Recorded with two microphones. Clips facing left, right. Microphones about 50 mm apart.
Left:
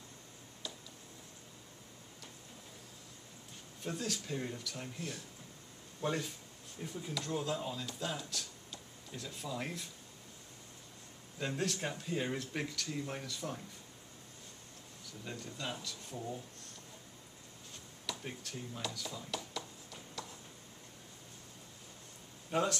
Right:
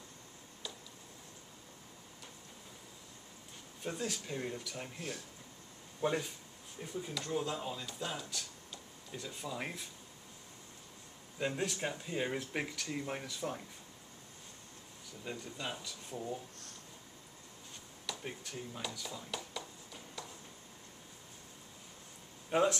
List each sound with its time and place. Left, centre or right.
3.8 s speech: centre
11.3 s speech: centre
15.2 s speech: centre
18.0 s a sound: centre
22.5 s speech: centre